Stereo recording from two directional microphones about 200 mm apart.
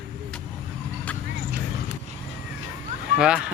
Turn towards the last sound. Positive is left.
turn(degrees=-5)  # may be behind; listen again after turning